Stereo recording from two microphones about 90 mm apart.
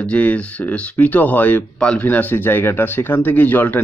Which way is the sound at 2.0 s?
20° left (ahead or behind).